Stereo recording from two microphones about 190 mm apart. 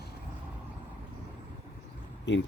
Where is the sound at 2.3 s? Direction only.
70° left (ahead or behind).